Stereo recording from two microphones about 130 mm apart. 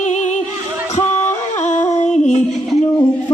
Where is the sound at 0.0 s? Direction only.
65° left (ahead or behind).